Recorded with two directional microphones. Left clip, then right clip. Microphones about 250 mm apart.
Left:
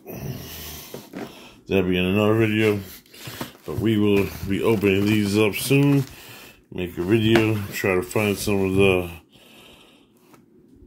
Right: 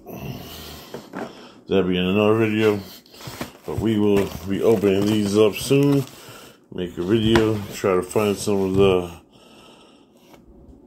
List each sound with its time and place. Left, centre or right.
0.1 s dog: left
1.4 s speech: left